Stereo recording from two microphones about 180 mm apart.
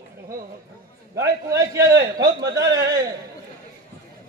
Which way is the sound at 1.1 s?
20° right (ahead or behind).